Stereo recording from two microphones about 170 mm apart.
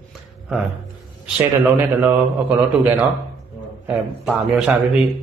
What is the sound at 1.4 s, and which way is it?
Speech, 15° right (ahead or behind).